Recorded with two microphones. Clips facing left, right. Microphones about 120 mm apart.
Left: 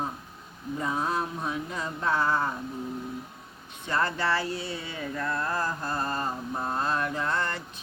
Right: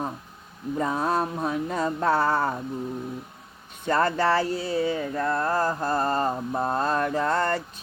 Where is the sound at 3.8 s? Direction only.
45° right (ahead or behind).